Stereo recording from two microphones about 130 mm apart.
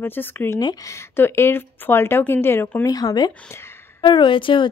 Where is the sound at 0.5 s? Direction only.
25° left (ahead or behind).